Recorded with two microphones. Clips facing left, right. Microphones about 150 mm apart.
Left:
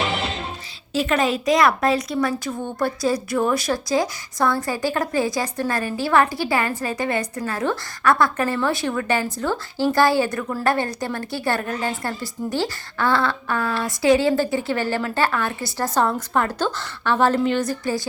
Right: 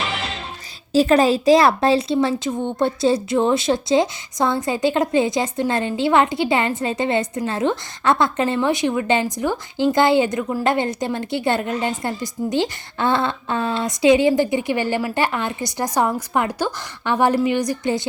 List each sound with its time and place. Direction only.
0.9 s speech: 35° right (ahead or behind); by 18.0 s 20° right (ahead or behind)